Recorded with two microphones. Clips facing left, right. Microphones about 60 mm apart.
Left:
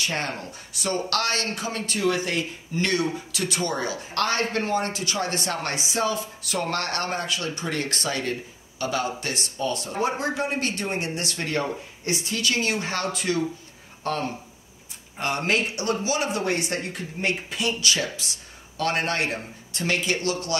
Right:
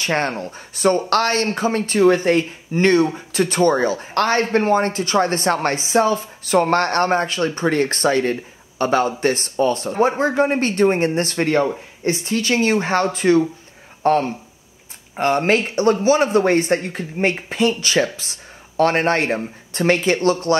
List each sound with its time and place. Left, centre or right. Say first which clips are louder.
0.0 s speech: right 8 dB; right